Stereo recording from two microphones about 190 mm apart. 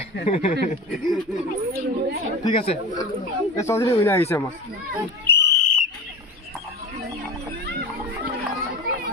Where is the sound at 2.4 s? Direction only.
30° left (ahead or behind).